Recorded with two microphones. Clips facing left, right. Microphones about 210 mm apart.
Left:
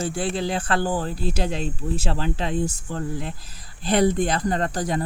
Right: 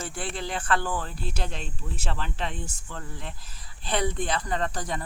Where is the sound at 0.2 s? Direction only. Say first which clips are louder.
Left 5 dB; 35° left (ahead or behind).